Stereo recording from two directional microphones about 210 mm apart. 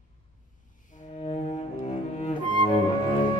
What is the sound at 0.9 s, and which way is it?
Cello, 35° left (ahead or behind).